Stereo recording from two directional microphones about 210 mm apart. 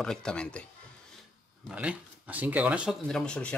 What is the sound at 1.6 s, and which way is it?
Speech, 5° right (ahead or behind).